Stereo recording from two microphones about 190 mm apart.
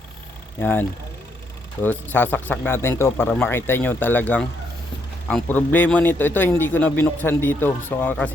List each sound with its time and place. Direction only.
0.6 s a man's voice: 10° left (ahead or behind)